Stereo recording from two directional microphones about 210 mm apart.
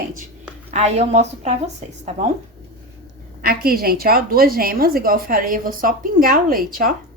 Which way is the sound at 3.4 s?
45° right (ahead or behind).